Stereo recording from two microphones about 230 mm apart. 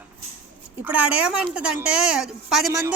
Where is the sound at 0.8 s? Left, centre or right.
Centre.